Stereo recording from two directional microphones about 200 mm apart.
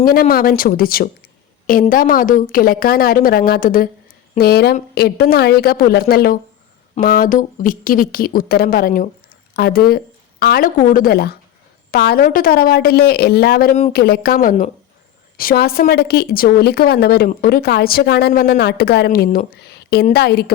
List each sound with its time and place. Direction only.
0.0 s a woman's voice: 45° left (ahead or behind)